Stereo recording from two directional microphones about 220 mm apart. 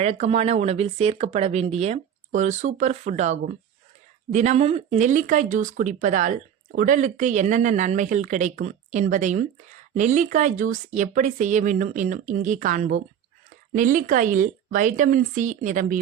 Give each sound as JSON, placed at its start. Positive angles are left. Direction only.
{"t": 0.0, "sound": "speech", "side_deg": -30}